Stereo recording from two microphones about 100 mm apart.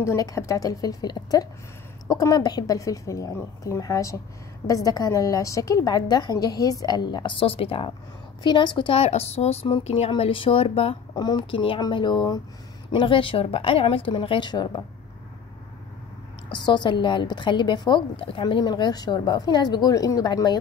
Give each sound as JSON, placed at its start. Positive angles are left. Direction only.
{"t": 0.0, "sound": "a woman's voice", "side_deg": 30}
{"t": 8.4, "sound": "a woman's voice", "side_deg": 50}
{"t": 8.9, "sound": "a woman's voice", "side_deg": 90}
{"t": 11.1, "sound": "a woman's voice", "side_deg": 45}
{"t": 11.5, "sound": "a woman's voice", "side_deg": 60}
{"t": 11.8, "sound": "a woman's voice", "side_deg": 50}
{"t": 16.6, "sound": "a woman's voice", "side_deg": 50}
{"t": 18.4, "sound": "a woman's voice", "side_deg": 45}